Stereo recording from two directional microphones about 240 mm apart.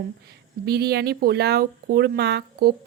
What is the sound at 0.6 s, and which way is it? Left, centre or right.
A woman's voice, right.